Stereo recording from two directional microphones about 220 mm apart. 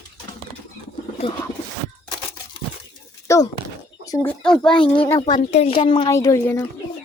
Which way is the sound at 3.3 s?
15° left (ahead or behind).